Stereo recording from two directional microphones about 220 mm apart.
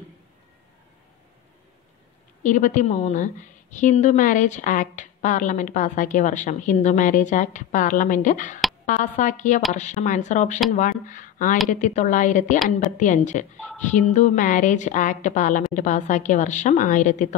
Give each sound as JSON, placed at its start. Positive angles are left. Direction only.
{"t": 2.4, "sound": "a woman's voice", "side_deg": 35}